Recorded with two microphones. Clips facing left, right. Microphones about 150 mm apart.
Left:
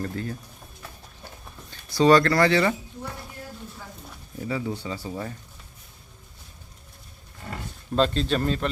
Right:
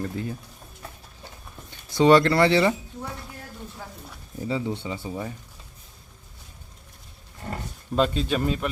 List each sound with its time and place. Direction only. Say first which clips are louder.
0.0 s a man's voice: right 1 dB; 15° right (ahead or behind)
1.7 s speech: right 1 dB; 20° right (ahead or behind)
4.4 s speech: right 1 dB; 25° right (ahead or behind)
5.0 s a man's voice: right 1 dB; 10° right (ahead or behind)
7.4 s a sound: right 3 dB; 40° right (ahead or behind)
7.9 s a man's voice: even; 10° right (ahead or behind)